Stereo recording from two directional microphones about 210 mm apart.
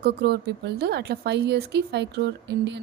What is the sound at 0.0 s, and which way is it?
A woman's voice, 50° right (ahead or behind).